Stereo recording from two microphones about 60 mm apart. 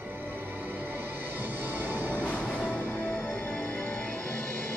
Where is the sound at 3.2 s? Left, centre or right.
Left.